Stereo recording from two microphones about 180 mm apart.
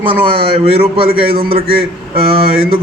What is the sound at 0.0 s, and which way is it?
A man's voice, 30° right (ahead or behind).